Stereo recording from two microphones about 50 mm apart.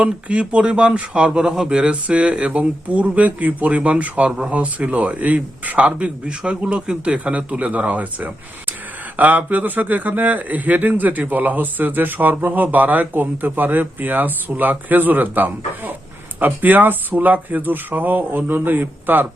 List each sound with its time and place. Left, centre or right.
0.0 s a man's voice: right
1.5 s a man's voice: centre; by 19.3 s right